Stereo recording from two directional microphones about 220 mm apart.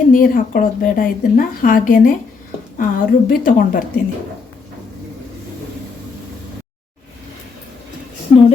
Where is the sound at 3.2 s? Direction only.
40° left (ahead or behind).